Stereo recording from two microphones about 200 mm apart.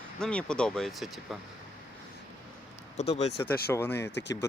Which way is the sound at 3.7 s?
15° left (ahead or behind).